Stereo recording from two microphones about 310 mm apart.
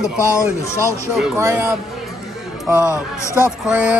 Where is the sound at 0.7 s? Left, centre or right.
Centre.